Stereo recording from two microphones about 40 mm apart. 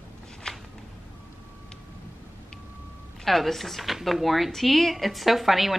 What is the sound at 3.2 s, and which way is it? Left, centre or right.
A woman's voice, centre.